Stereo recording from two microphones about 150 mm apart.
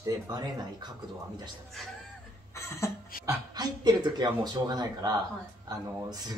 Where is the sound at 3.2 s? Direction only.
25° right (ahead or behind).